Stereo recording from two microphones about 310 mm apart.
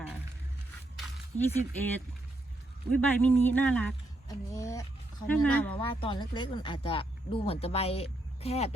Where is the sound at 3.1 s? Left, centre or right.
Centre.